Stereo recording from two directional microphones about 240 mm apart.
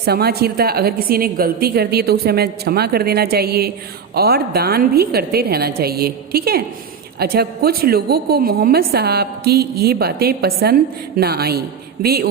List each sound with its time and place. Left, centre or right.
0.0 s a woman's voice: right